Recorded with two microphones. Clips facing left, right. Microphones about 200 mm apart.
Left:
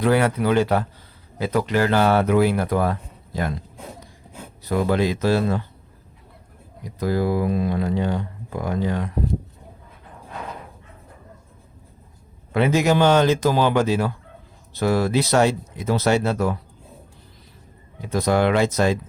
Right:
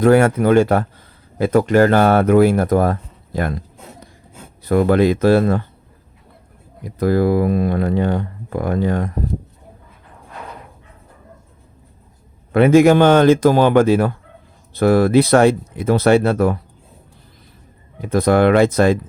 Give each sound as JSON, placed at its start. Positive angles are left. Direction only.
{"t": 0.0, "sound": "speech", "side_deg": -50}
{"t": 4.6, "sound": "speech", "side_deg": -55}
{"t": 6.8, "sound": "speech", "side_deg": -55}
{"t": 12.5, "sound": "speech", "side_deg": -55}
{"t": 18.0, "sound": "speech", "side_deg": -55}